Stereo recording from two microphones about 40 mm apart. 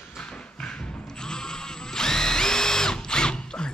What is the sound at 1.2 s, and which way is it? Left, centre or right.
Drill, centre.